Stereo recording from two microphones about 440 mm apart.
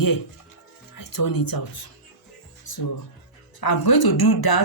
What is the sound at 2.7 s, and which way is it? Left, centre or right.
Music, left.